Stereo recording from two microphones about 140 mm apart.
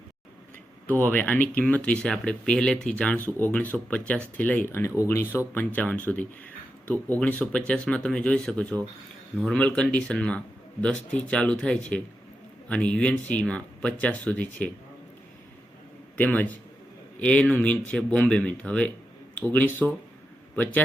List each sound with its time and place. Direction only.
0.9 s speech: 10° left (ahead or behind)
16.1 s speech: 10° left (ahead or behind)